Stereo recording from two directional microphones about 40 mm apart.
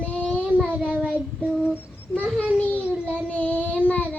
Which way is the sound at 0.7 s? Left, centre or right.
Right.